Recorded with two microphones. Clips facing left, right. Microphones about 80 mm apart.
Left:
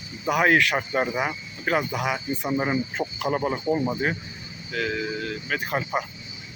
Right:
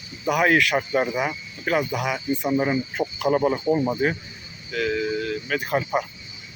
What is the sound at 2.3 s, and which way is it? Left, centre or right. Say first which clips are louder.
Speech: right 4 dB; centre.